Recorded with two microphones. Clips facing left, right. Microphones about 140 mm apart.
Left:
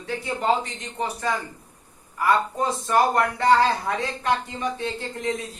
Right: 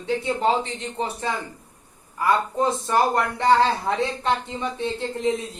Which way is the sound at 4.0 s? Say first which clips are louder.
Right 1 dB; 25° right (ahead or behind).